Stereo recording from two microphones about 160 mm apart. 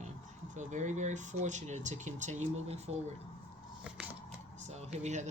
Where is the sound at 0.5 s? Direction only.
50° right (ahead or behind).